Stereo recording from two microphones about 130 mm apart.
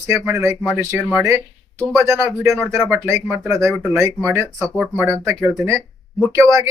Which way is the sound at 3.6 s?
Centre (ahead or behind).